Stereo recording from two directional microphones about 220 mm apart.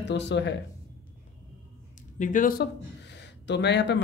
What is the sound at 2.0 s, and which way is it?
Speech, 35° left (ahead or behind).